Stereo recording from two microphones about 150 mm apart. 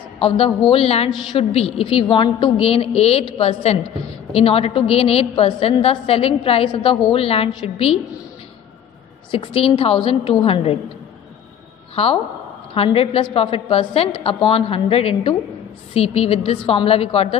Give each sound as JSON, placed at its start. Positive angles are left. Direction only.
{"t": 0.7, "sound": "a woman's voice", "side_deg": 40}
{"t": 9.3, "sound": "a woman's voice", "side_deg": 35}
{"t": 11.9, "sound": "a woman's voice", "side_deg": 40}